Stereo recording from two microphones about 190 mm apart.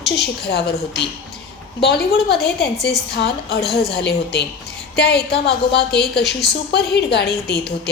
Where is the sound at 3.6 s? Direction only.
Centre (ahead or behind).